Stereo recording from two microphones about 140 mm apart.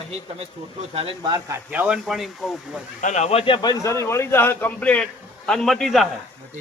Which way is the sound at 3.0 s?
55° left (ahead or behind).